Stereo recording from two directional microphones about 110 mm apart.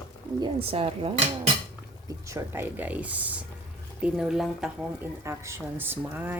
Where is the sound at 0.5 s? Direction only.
60° right (ahead or behind).